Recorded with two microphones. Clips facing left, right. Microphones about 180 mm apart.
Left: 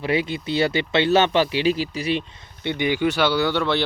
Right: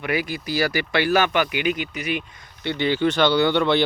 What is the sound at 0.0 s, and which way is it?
Speech, 25° left (ahead or behind).